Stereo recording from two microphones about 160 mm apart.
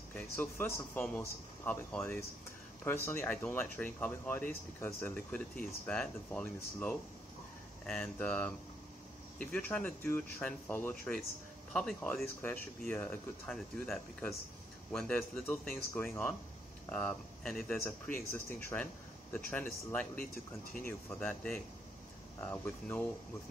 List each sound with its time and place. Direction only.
0.1 s speech: 10° left (ahead or behind)